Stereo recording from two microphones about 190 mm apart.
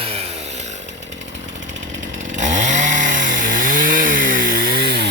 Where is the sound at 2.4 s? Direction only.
40° right (ahead or behind).